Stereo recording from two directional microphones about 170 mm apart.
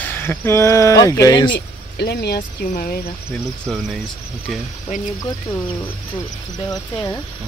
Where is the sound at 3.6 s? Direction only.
Centre (ahead or behind).